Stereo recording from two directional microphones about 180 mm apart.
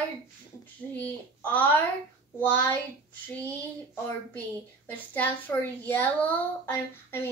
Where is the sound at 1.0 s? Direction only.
10° left (ahead or behind).